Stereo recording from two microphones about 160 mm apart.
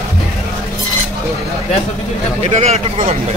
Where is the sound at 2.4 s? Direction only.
40° right (ahead or behind).